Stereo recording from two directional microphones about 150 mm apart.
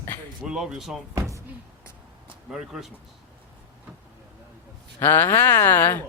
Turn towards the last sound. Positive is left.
turn(degrees=15)  # may be behind; listen again after turning